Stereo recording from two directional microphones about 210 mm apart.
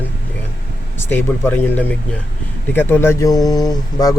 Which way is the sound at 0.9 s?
10° left (ahead or behind).